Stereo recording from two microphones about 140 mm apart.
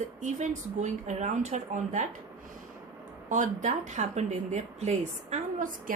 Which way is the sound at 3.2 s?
65° right (ahead or behind).